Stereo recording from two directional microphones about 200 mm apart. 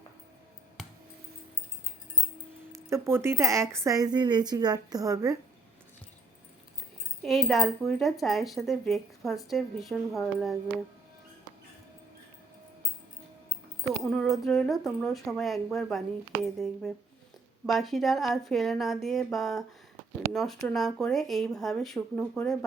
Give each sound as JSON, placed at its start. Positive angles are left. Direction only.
{"t": 2.7, "sound": "a woman's voice", "side_deg": -15}
{"t": 7.2, "sound": "speech", "side_deg": 0}
{"t": 14.0, "sound": "speech", "side_deg": 0}